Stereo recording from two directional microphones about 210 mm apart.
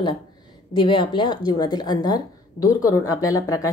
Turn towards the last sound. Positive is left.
turn(degrees=15)  # may be behind; listen again after turning